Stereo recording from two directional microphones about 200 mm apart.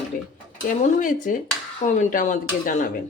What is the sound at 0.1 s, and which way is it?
Stir, 45° left (ahead or behind).